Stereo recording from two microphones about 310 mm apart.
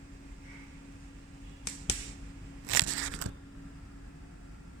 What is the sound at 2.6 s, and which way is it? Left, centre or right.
Scissors, right.